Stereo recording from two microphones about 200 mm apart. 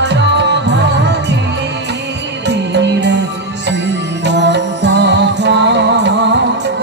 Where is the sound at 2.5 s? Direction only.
60° right (ahead or behind).